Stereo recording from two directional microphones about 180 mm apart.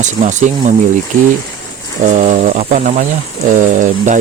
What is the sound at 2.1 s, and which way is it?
Speech, 40° right (ahead or behind).